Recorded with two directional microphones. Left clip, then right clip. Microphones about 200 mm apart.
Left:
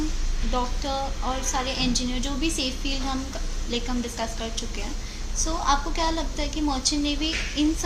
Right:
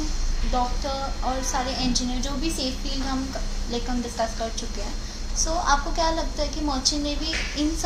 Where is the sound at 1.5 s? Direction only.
60° left (ahead or behind).